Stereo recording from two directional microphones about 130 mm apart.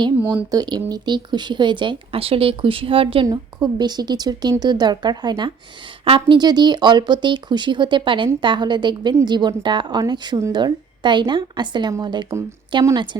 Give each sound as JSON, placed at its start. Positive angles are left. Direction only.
{"t": 0.5, "sound": "speech", "side_deg": -30}
{"t": 3.2, "sound": "speech", "side_deg": -35}